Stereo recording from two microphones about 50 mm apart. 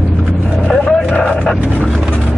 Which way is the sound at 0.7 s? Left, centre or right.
Left.